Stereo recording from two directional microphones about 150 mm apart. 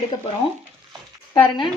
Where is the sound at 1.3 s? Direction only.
35° left (ahead or behind).